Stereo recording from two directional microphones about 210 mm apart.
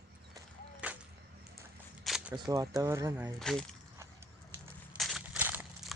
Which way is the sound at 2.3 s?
15° right (ahead or behind).